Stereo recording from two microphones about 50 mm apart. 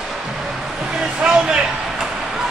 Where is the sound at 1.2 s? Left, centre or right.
Centre.